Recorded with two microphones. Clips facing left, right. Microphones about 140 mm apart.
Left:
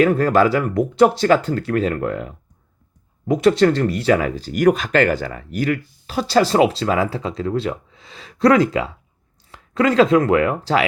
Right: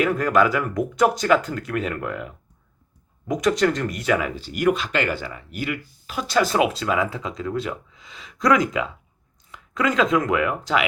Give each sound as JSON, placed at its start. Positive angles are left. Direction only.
{"t": 0.0, "sound": "speech", "side_deg": 35}